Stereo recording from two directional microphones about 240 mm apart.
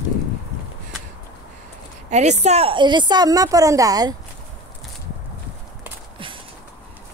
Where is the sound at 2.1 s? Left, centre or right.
Right.